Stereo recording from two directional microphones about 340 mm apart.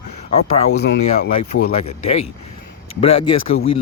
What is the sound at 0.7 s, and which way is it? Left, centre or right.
Speech, left.